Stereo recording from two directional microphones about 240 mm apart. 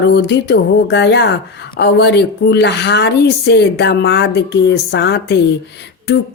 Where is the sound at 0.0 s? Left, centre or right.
Left.